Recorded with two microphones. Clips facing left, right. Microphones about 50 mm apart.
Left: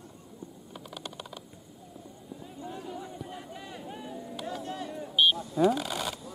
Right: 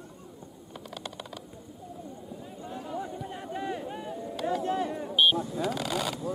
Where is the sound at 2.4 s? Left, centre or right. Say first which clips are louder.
Left 1 dB; centre.